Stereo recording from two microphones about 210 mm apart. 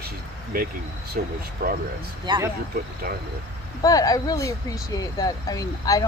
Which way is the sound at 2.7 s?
45° right (ahead or behind).